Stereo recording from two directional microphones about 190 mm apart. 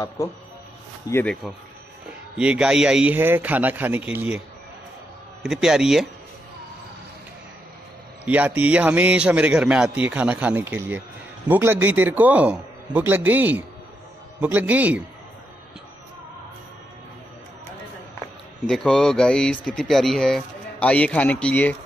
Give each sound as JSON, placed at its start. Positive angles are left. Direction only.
{"t": 0.2, "sound": "speech", "side_deg": 15}
{"t": 1.1, "sound": "a man's voice", "side_deg": 5}
{"t": 5.4, "sound": "speech", "side_deg": -5}
{"t": 8.3, "sound": "a man's voice", "side_deg": -10}
{"t": 18.7, "sound": "speech", "side_deg": 5}